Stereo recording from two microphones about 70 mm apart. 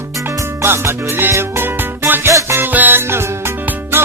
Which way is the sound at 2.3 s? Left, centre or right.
Right.